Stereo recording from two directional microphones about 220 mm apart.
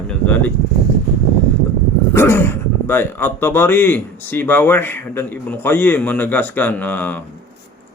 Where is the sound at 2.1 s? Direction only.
10° left (ahead or behind).